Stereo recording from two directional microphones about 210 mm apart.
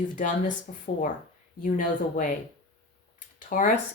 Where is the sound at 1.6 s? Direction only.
40° left (ahead or behind).